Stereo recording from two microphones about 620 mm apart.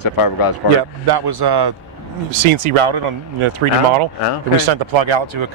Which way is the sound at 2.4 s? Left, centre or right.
Right.